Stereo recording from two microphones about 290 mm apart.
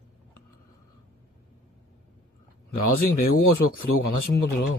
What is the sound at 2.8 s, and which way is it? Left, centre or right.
Speech, left.